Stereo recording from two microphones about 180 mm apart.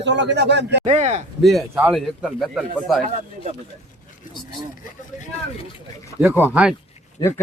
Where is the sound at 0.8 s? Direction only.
35° right (ahead or behind).